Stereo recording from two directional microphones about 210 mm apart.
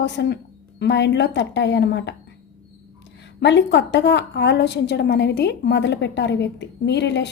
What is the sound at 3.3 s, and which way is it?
A woman's voice, 55° left (ahead or behind).